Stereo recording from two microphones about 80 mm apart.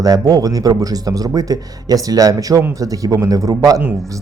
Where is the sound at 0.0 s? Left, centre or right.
Right.